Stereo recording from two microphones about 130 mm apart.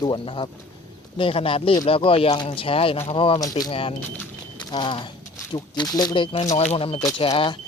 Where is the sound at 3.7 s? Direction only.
45° left (ahead or behind).